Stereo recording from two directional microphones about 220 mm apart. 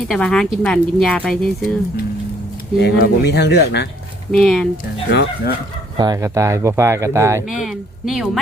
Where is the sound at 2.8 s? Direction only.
45° left (ahead or behind).